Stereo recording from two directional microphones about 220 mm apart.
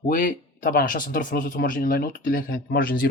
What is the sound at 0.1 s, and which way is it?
Speech, 40° left (ahead or behind).